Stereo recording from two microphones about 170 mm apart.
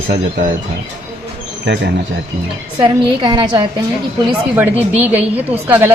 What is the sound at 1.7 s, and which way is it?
Speech, 90° right.